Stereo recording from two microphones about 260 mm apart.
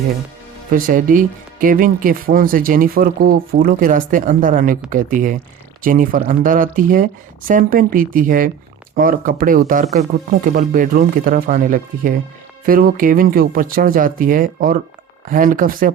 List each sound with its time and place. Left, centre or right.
0.7 s speech: right